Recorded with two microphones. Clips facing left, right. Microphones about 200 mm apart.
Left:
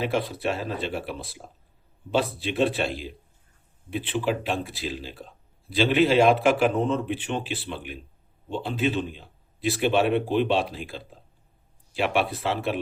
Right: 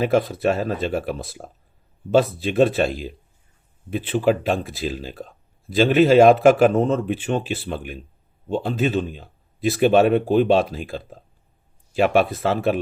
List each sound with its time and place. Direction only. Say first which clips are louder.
0.0 s speech: right 7 dB; 45° right (ahead or behind)